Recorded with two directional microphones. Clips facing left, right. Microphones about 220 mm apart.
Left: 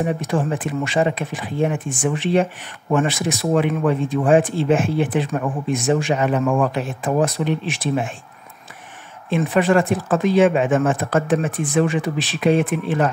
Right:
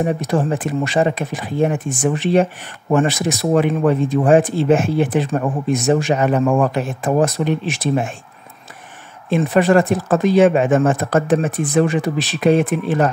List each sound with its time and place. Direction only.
0.0 s speech: 40° right (ahead or behind)
9.3 s speech: 40° right (ahead or behind)